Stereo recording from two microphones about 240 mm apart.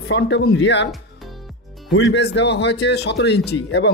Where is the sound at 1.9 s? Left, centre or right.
Left.